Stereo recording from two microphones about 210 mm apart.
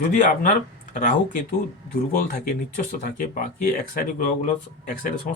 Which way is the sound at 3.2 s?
40° left (ahead or behind).